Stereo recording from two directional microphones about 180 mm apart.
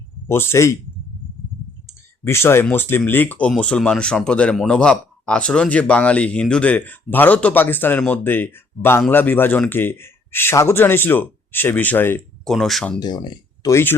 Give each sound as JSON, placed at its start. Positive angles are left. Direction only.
{"t": 0.3, "sound": "speech", "side_deg": 15}
{"t": 1.9, "sound": "speech", "side_deg": 15}
{"t": 12.5, "sound": "speech", "side_deg": 0}
{"t": 13.0, "sound": "speech", "side_deg": 25}